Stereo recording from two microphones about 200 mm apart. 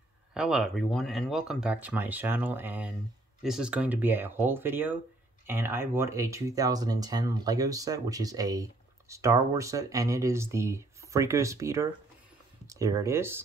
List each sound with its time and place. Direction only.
0.3 s speech: 5° right (ahead or behind)